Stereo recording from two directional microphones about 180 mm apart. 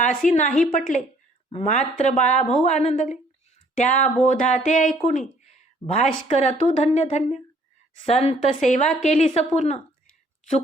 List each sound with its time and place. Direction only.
0.0 s a woman's voice: 45° left (ahead or behind)